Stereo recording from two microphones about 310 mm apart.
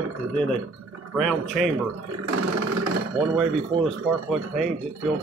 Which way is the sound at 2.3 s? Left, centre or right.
Right.